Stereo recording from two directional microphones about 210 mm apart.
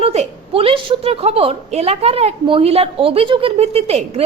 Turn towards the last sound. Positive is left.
turn(degrees=-30)  # may be behind; listen again after turning